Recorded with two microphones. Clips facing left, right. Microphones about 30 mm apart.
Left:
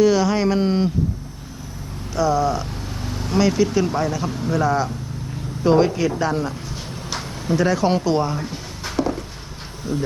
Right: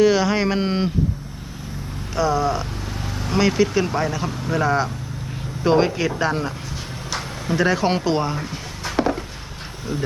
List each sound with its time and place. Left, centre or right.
0.0 s speech: centre
2.1 s speech: centre
9.0 s a sound: right
9.9 s speech: right